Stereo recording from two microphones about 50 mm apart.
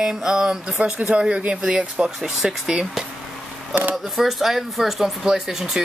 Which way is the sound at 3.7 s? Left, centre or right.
Right.